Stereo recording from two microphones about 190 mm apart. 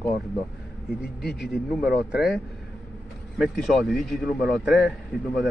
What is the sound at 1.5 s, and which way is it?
A man's voice, 5° right (ahead or behind).